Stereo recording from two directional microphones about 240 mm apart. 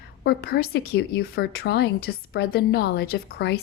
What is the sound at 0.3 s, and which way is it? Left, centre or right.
A woman's voice, left.